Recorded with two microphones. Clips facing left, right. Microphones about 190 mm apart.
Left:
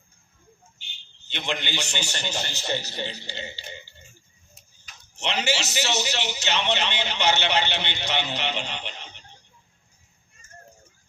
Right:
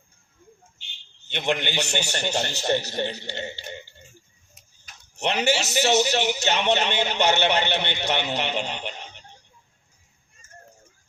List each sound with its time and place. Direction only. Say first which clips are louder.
1.3 s a man's voice: right 5 dB; 55° right (ahead or behind)
5.2 s a man's voice: right 4 dB; 55° right (ahead or behind)